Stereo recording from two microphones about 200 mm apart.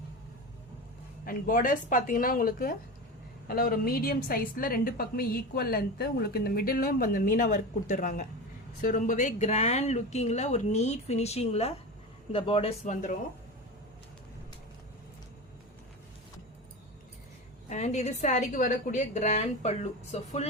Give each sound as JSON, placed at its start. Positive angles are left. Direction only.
{"t": 1.2, "sound": "a woman's voice", "side_deg": 45}
{"t": 17.7, "sound": "speech", "side_deg": 35}